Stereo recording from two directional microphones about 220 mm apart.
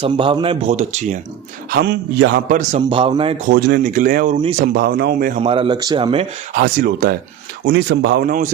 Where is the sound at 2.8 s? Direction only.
20° right (ahead or behind).